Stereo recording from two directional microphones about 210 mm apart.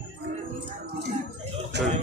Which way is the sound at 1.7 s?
50° right (ahead or behind).